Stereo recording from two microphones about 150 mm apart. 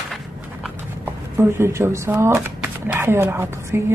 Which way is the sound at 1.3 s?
15° right (ahead or behind).